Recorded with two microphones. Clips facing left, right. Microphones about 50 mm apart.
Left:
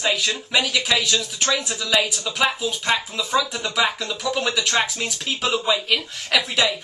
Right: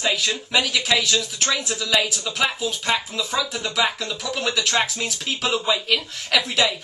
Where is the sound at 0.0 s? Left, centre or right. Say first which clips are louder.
Even; centre.